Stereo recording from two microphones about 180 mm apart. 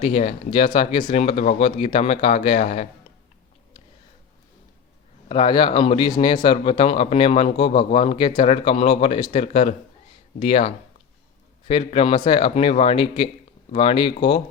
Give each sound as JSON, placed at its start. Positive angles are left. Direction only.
{"t": 0.0, "sound": "a man's voice", "side_deg": 35}
{"t": 5.3, "sound": "a man's voice", "side_deg": 30}
{"t": 11.7, "sound": "a man's voice", "side_deg": 35}